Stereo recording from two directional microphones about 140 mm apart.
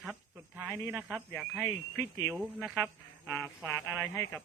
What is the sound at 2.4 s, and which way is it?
Speech, centre (ahead or behind).